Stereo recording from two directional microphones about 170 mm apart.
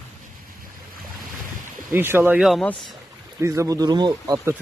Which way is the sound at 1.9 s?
15° right (ahead or behind).